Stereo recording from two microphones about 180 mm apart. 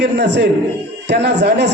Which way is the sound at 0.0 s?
70° right (ahead or behind).